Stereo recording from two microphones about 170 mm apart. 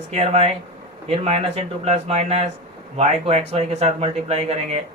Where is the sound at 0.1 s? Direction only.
40° right (ahead or behind).